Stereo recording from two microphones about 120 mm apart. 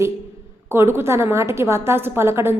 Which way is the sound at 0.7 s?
20° right (ahead or behind).